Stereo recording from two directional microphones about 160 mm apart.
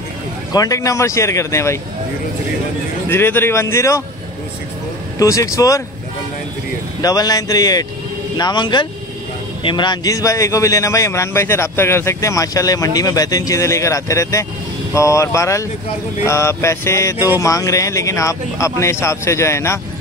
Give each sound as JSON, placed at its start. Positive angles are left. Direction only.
{"t": 0.5, "sound": "a man's voice", "side_deg": 20}
{"t": 3.1, "sound": "a sound", "side_deg": 15}
{"t": 5.2, "sound": "a man's voice", "side_deg": 20}
{"t": 7.0, "sound": "a man's voice", "side_deg": 25}
{"t": 16.3, "sound": "a sound", "side_deg": 15}
{"t": 17.4, "sound": "a man's voice", "side_deg": 20}